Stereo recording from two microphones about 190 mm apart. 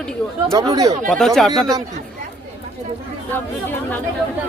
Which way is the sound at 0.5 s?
20° right (ahead or behind).